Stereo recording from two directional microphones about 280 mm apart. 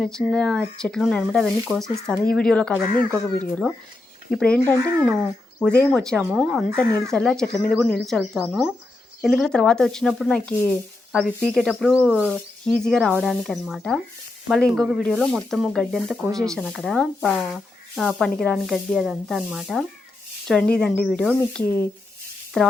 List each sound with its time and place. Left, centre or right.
0.0 s speech: centre
2.9 s speech: centre
3.5 s speech: centre